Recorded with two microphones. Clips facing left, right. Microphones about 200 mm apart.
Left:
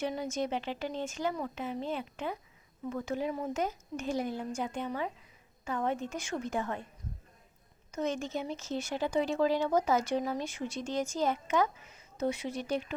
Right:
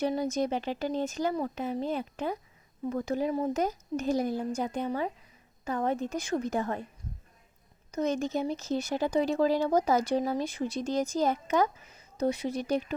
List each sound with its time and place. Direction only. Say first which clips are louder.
0.0 s speech: right 5 dB; 35° right (ahead or behind)
7.9 s speech: right 4 dB; 40° right (ahead or behind)